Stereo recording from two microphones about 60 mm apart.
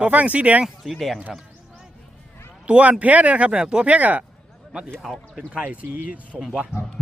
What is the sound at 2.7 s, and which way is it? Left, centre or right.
Speech, centre.